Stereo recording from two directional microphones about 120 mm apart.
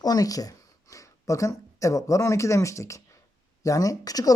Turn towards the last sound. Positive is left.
turn(degrees=30)  # may be behind; listen again after turning